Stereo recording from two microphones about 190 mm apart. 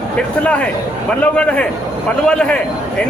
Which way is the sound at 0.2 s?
5° left (ahead or behind).